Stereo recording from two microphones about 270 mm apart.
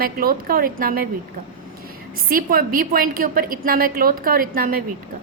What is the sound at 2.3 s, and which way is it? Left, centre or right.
A woman's voice, right.